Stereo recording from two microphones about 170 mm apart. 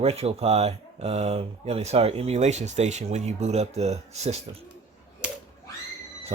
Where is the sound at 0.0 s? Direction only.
35° right (ahead or behind).